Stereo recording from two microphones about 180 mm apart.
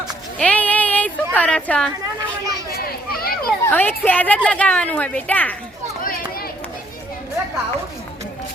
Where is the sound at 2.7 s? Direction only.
55° left (ahead or behind).